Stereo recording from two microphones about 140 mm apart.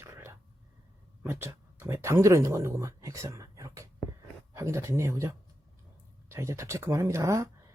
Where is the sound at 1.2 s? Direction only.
15° right (ahead or behind).